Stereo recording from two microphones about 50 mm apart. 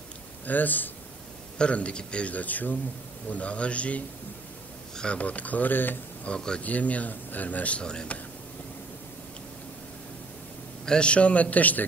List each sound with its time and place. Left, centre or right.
0.5 s speech: left
1.6 s speech: left
6.2 s speech: centre
6.6 s speech: left
7.8 s speech: centre
10.9 s speech: left